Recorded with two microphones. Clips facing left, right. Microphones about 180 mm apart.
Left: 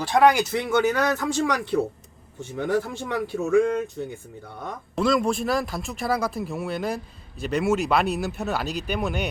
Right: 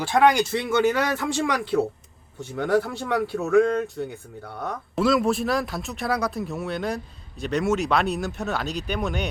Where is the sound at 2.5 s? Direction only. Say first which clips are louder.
Right 2 dB; 15° left (ahead or behind).